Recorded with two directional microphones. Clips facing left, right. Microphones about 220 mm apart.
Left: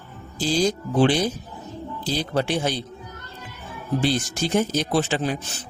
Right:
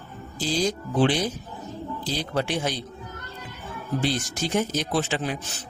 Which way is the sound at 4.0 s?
30° left (ahead or behind).